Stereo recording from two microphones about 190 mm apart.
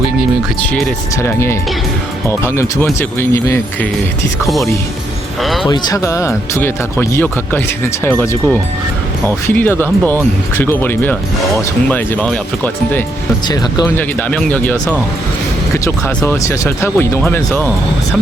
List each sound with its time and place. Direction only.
0.7 s speech: 10° left (ahead or behind)
4.4 s speech: centre (ahead or behind)
5.6 s speech: 20° left (ahead or behind)